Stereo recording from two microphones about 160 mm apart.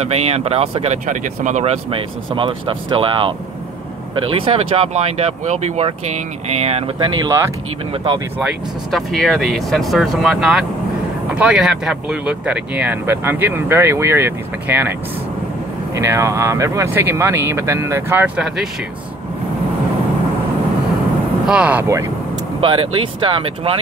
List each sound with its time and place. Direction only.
0.0 s speech: 40° right (ahead or behind); by 7.5 s 20° right (ahead or behind)
7.9 s speech: 30° right (ahead or behind)
8.9 s speech: 5° left (ahead or behind)
21.5 s speech: 10° right (ahead or behind)
22.6 s speech: 30° right (ahead or behind)